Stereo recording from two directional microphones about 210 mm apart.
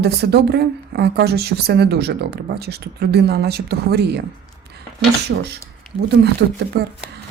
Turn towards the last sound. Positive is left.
turn(degrees=-50)  # may be behind; listen again after turning